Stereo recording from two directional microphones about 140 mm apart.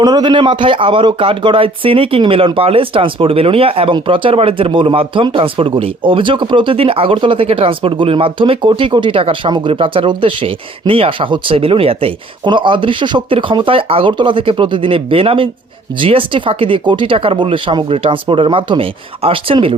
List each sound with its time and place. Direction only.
0.0 s speech: 30° right (ahead or behind)